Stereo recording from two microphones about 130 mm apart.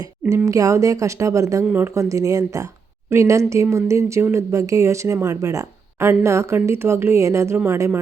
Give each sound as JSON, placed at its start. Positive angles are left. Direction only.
{"t": 0.0, "sound": "speech", "side_deg": -20}